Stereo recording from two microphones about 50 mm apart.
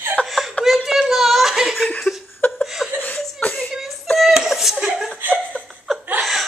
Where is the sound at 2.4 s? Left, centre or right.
Left.